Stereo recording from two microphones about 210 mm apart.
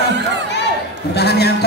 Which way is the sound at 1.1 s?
50° left (ahead or behind).